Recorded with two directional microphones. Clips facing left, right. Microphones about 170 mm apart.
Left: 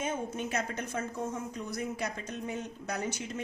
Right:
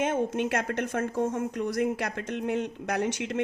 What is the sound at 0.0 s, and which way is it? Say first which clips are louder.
A woman's voice: right 8 dB; 90° right.